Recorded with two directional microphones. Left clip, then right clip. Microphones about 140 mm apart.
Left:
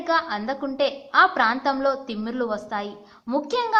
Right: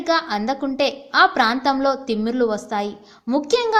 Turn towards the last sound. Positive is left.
turn(degrees=-45)  # may be behind; listen again after turning